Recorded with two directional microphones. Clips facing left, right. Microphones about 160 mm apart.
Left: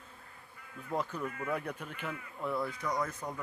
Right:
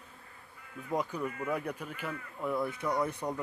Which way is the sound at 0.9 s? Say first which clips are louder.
Right 2 dB; 15° right (ahead or behind).